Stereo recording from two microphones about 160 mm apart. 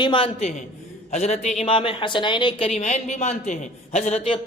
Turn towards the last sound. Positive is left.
turn(degrees=40)  # may be behind; listen again after turning